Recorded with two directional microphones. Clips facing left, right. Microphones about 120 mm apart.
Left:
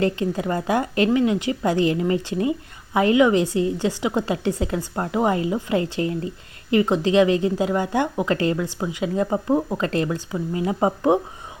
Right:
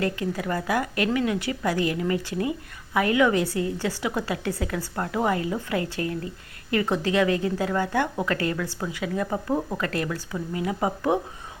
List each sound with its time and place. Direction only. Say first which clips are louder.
0.0 s a woman's voice: left 5 dB; 25° left (ahead or behind)